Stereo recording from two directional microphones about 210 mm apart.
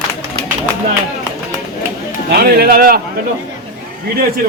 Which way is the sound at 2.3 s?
45° right (ahead or behind).